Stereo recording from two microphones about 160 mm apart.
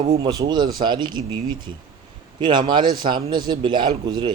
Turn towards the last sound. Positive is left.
turn(degrees=-30)  # may be behind; listen again after turning